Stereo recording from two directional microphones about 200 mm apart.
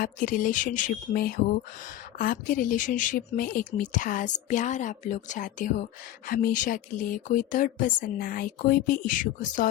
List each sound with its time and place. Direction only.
0.0 s speech: 40° left (ahead or behind)